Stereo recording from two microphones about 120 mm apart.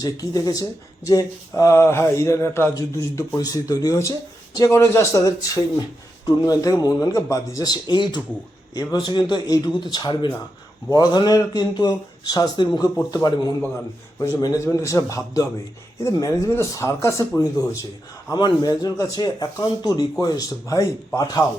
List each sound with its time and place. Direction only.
0.0 s speech: 30° left (ahead or behind)